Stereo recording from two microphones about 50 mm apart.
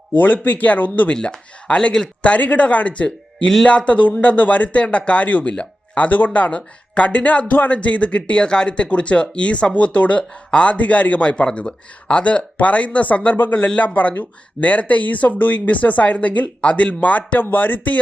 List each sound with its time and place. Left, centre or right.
0.2 s speech: left
1.1 s a man's voice: centre; by 17.9 s left